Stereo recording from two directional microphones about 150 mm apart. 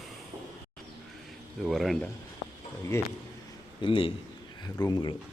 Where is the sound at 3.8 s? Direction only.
35° left (ahead or behind).